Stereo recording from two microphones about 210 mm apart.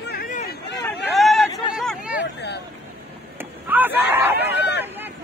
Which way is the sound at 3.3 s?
10° right (ahead or behind).